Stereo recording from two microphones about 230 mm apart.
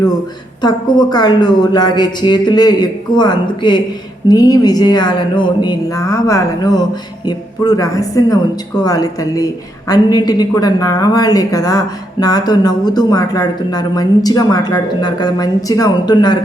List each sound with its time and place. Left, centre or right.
0.6 s a woman's voice: centre